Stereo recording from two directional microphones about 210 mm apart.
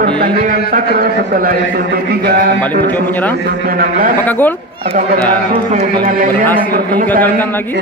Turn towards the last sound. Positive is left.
turn(degrees=10)  # may be behind; listen again after turning